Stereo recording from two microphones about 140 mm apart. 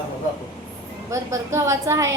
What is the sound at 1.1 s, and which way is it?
A woman's voice, 20° right (ahead or behind).